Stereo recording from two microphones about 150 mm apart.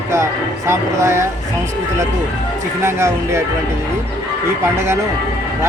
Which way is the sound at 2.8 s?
20° right (ahead or behind).